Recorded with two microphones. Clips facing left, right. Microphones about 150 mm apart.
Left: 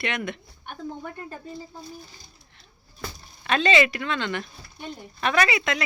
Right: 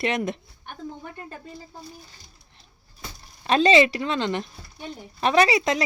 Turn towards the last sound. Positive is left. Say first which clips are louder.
# right 4 dB
turn(degrees=-35)  # may be behind; listen again after turning